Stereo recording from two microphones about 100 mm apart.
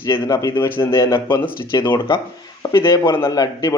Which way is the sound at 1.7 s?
40° left (ahead or behind).